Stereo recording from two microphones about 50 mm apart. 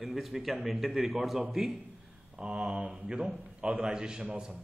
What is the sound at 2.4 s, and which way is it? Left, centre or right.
A man's voice, right.